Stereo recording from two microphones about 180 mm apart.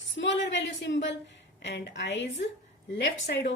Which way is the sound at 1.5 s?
75° left (ahead or behind).